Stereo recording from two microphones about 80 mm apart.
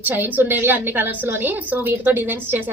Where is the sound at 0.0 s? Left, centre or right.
Right.